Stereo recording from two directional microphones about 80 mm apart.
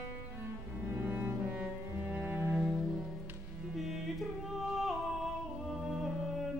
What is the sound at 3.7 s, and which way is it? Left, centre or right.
Music, centre.